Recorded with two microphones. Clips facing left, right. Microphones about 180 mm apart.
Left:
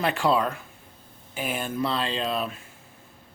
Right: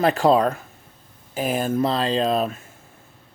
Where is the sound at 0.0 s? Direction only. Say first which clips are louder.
Right 6 dB; 40° right (ahead or behind).